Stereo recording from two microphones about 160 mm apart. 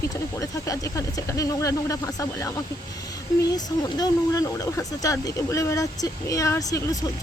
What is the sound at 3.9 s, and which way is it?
Speech, 25° left (ahead or behind).